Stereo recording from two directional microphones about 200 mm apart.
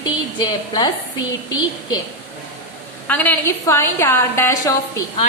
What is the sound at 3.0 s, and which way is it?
A woman's voice, 10° left (ahead or behind).